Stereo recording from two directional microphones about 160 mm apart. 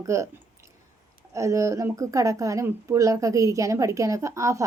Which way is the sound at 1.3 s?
20° right (ahead or behind).